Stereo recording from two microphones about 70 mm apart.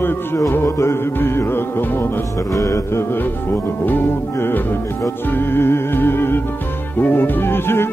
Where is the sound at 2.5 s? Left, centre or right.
Left.